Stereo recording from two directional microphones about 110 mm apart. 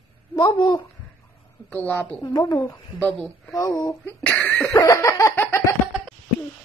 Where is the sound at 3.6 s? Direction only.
35° left (ahead or behind).